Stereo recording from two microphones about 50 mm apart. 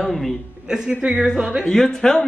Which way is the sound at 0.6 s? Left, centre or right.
Centre.